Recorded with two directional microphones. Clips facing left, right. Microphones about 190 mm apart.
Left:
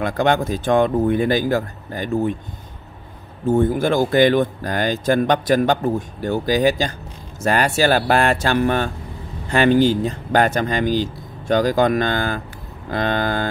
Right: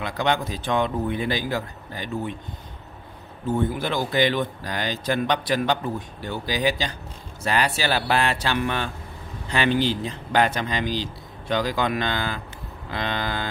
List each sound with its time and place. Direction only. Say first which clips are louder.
0.0 s speech: left 6 dB; 50° left (ahead or behind)
3.4 s speech: left 7 dB; 45° left (ahead or behind)